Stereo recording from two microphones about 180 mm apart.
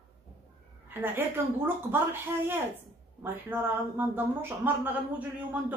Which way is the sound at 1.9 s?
10° right (ahead or behind).